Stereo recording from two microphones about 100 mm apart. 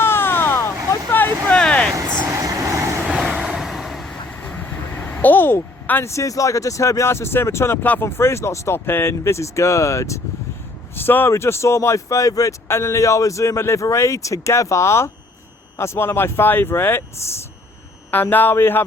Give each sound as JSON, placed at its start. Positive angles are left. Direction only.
{"t": 0.0, "sound": "a sound", "side_deg": 25}
{"t": 1.5, "sound": "vehicle", "side_deg": 10}
{"t": 2.2, "sound": "vehicle", "side_deg": -30}
{"t": 3.1, "sound": "vehicle", "side_deg": -10}
{"t": 10.9, "sound": "speech", "side_deg": 20}